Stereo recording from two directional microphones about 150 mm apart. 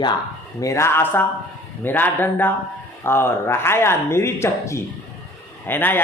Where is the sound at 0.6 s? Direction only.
20° left (ahead or behind).